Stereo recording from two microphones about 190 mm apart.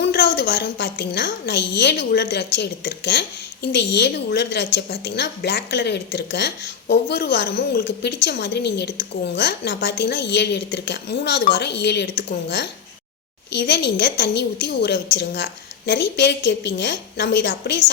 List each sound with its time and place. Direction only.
0.0 s a woman's voice: 55° left (ahead or behind)